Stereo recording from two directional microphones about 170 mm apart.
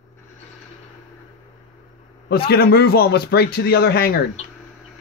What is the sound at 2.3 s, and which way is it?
Speech, 65° left (ahead or behind).